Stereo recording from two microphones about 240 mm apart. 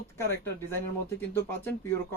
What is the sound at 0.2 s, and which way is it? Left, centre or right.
Speech, centre.